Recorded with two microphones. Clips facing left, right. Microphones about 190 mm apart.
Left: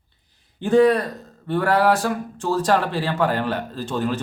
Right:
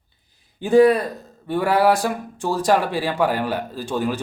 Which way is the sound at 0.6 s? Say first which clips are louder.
Right 2 dB; 10° right (ahead or behind).